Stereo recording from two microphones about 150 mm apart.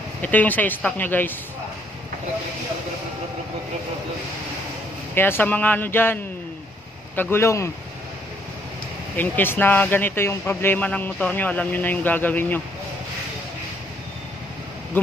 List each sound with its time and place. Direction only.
0.2 s speech: 10° left (ahead or behind)
5.1 s speech: 15° left (ahead or behind)
7.2 s speech: 15° left (ahead or behind)
9.1 s speech: 15° left (ahead or behind)